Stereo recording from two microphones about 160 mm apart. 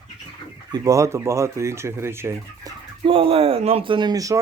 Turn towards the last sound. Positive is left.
turn(degrees=-25)  # may be behind; listen again after turning